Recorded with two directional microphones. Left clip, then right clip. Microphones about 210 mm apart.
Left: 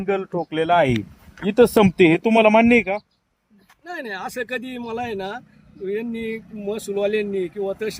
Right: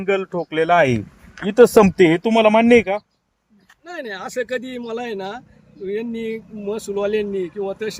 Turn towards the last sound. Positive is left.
turn(degrees=5)  # may be behind; listen again after turning